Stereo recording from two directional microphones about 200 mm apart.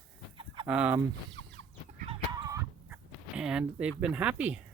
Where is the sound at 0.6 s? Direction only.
5° right (ahead or behind).